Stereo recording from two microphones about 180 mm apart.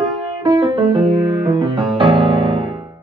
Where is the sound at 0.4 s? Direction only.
20° right (ahead or behind).